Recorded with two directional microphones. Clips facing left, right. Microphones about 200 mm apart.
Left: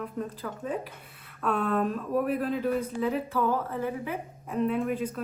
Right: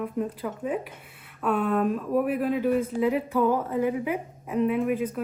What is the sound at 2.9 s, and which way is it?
A woman's voice, 15° right (ahead or behind).